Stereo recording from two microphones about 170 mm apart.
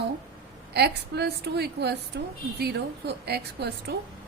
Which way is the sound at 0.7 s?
70° right (ahead or behind).